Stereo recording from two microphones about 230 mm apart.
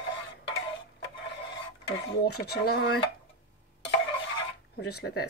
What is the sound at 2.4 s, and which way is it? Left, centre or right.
Speech, left.